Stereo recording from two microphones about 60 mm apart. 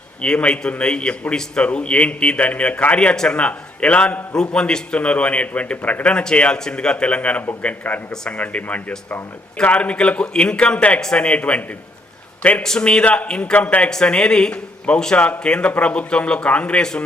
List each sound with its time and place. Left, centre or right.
0.2 s a man's voice: centre
12.6 s a man's voice: centre